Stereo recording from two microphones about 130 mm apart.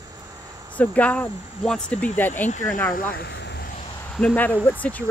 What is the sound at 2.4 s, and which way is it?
Speech, 70° left (ahead or behind).